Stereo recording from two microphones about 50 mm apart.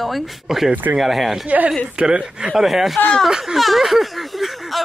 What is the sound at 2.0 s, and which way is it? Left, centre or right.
Speech, centre.